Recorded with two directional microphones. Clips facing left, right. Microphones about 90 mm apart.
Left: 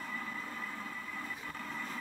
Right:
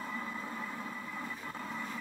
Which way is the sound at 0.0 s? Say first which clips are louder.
Right 2 dB; 15° right (ahead or behind).